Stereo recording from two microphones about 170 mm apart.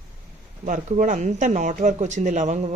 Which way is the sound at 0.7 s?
50° right (ahead or behind).